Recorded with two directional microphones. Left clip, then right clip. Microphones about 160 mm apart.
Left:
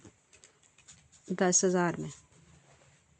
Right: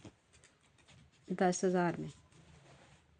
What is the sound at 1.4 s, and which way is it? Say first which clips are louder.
Speech: left 5 dB; 40° left (ahead or behind).